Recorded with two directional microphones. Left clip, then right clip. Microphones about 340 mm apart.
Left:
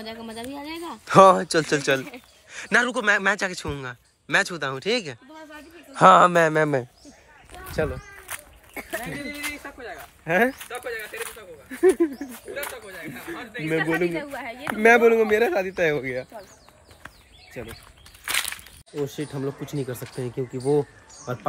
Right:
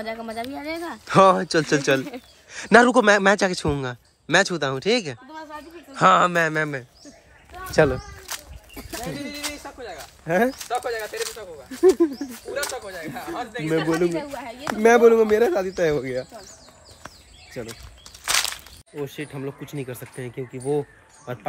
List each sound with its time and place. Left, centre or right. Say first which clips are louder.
0.0 s a man's voice: right 5 dB; centre
7.7 s speech: right 8 dB; right
9.4 s bird: even; centre
11.1 s speech: right 5 dB; centre
12.8 s a man's voice: right 4 dB; centre
13.7 s a man's voice: right 1 dB; centre
18.9 s speech: left 2 dB; centre